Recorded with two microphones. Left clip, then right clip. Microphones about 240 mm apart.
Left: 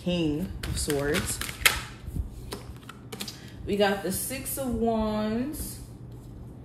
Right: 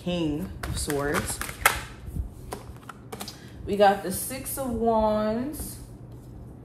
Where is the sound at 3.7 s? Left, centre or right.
Centre.